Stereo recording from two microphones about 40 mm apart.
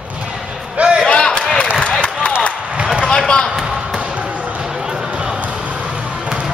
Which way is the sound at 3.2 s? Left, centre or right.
Centre.